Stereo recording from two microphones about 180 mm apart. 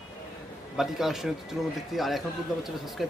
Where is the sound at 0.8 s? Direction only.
Centre (ahead or behind).